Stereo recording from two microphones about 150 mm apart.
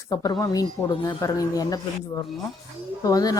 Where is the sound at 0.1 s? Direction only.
25° left (ahead or behind).